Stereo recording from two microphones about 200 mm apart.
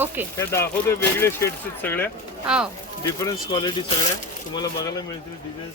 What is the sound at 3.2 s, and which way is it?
Speech, 20° left (ahead or behind).